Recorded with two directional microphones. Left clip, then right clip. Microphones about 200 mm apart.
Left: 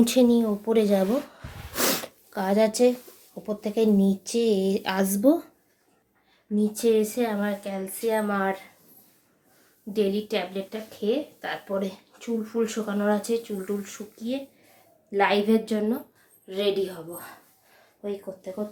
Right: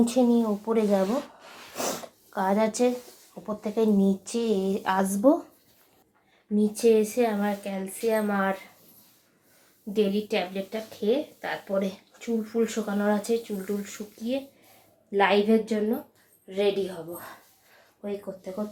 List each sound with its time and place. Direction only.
0.0 s speech: 20° left (ahead or behind)
2.3 s speech: 25° left (ahead or behind)
6.6 s speech: centre (ahead or behind)
9.9 s speech: centre (ahead or behind)